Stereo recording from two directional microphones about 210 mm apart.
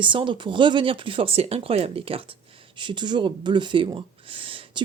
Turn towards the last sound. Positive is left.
turn(degrees=-25)  # may be behind; listen again after turning